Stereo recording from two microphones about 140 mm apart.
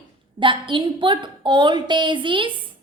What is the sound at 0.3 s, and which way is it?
A woman's voice, 35° right (ahead or behind).